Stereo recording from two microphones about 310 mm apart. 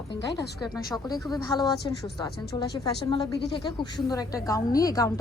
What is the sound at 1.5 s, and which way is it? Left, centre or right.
A woman's voice, centre.